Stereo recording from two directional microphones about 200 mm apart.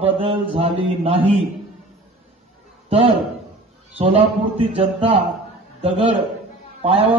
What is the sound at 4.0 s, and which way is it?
A man's voice, 25° right (ahead or behind).